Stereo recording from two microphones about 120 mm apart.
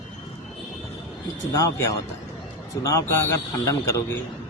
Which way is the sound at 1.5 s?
25° left (ahead or behind).